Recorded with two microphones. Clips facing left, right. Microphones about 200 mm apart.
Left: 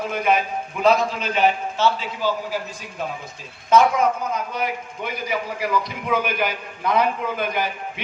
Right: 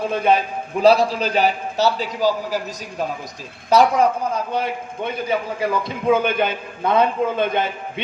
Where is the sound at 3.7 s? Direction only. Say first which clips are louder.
Right 2 dB; 35° right (ahead or behind).